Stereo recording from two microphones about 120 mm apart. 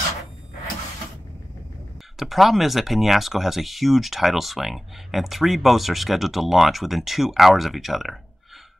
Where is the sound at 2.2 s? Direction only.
Centre (ahead or behind).